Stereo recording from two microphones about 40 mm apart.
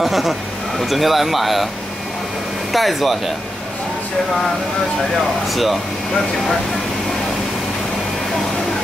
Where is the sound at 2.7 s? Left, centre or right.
Centre.